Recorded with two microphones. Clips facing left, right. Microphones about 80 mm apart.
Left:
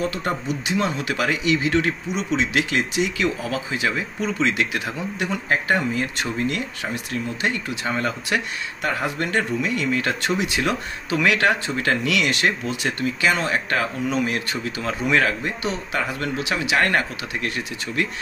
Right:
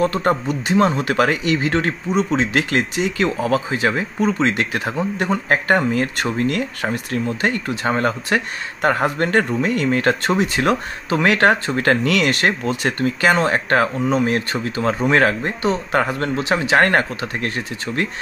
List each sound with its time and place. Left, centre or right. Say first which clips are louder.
0.0 s speech: right 7 dB; right